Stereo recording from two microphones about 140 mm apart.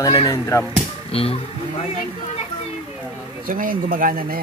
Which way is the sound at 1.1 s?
45° left (ahead or behind).